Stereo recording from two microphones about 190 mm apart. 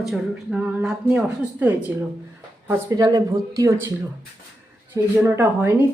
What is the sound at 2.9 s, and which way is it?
Speech, 20° right (ahead or behind).